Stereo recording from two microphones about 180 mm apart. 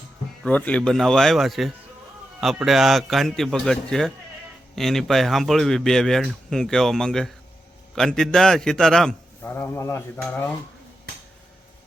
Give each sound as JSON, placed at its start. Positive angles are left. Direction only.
{"t": 0.4, "sound": "speech", "side_deg": 5}